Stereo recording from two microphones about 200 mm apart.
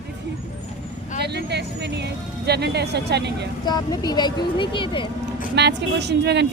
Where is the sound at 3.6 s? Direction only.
20° left (ahead or behind).